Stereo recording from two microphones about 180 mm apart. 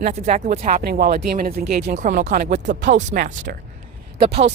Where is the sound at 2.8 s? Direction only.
40° right (ahead or behind).